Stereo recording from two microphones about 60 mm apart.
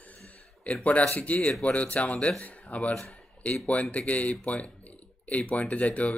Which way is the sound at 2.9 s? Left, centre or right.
Centre.